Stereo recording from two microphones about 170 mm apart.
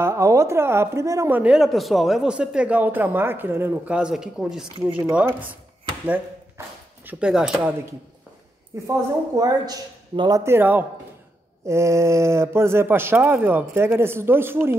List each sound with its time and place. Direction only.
0.0 s a woman's voice: 15° right (ahead or behind)
7.1 s speech: 5° right (ahead or behind)
8.8 s a man's voice: 20° right (ahead or behind)
10.4 s a woman's voice: 10° right (ahead or behind)